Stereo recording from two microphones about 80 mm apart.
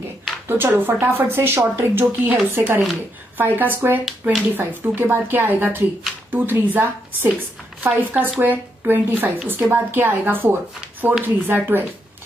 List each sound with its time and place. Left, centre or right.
0.5 s speech: right
4.0 s speech: centre
4.6 s speech: right